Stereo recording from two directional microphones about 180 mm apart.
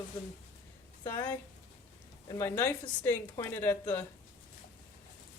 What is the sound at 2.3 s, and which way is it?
A woman's voice, 15° left (ahead or behind).